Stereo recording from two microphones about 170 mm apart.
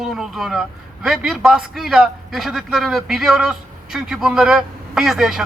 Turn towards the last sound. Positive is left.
turn(degrees=0)  # may be behind; listen again after turning